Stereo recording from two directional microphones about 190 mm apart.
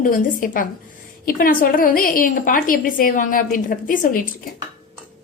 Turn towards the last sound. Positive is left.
turn(degrees=45)  # may be behind; listen again after turning